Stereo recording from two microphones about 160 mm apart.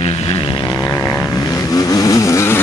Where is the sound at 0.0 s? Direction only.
40° left (ahead or behind).